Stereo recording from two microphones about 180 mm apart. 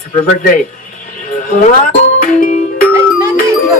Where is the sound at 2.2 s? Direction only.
50° left (ahead or behind).